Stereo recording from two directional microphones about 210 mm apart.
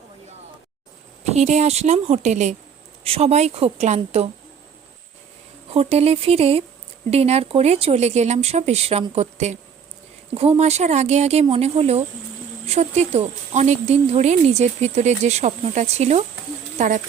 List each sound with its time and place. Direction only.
1.3 s speech: 30° right (ahead or behind)
5.7 s speech: 30° right (ahead or behind)